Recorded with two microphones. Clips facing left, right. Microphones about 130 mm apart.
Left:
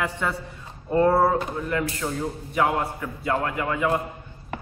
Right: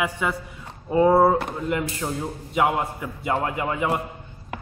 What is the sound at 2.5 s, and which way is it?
A man's voice, 20° right (ahead or behind).